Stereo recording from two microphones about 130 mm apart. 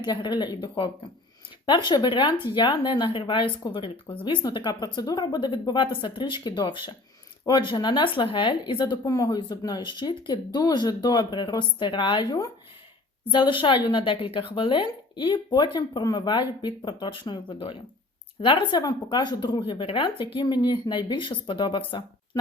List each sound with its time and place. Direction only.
0.0 s speech: 35° left (ahead or behind)